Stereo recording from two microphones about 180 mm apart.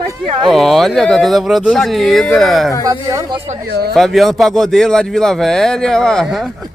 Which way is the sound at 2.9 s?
20° right (ahead or behind).